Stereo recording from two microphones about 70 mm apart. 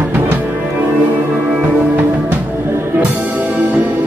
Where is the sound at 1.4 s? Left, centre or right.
Right.